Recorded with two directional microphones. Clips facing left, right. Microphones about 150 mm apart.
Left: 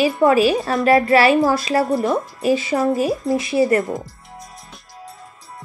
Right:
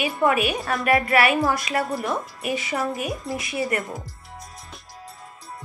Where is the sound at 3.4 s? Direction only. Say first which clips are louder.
Left 10 dB; 30° left (ahead or behind).